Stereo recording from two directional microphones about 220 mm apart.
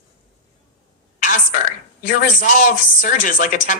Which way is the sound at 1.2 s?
35° left (ahead or behind).